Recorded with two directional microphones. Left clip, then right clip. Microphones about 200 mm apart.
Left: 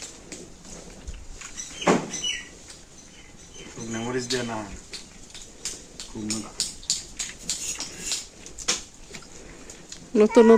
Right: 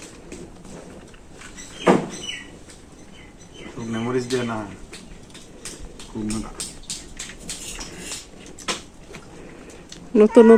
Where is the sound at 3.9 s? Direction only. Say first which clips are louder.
Right 4 dB; 10° left (ahead or behind).